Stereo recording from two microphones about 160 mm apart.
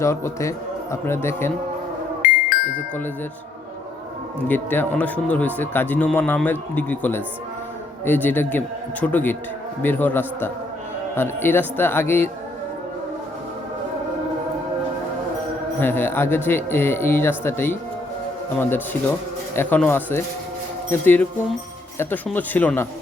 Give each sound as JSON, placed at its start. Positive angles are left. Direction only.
{"t": 0.0, "sound": "speech", "side_deg": 15}
{"t": 2.2, "sound": "music", "side_deg": 60}
{"t": 4.4, "sound": "speech", "side_deg": 10}
{"t": 15.8, "sound": "speech", "side_deg": 15}
{"t": 19.5, "sound": "speech", "side_deg": 10}